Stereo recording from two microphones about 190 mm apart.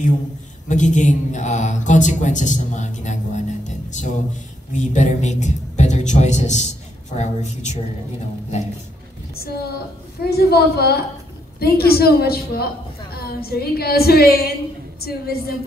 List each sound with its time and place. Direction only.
0.7 s a man's voice: 40° left (ahead or behind)
9.3 s a woman's voice: 55° left (ahead or behind)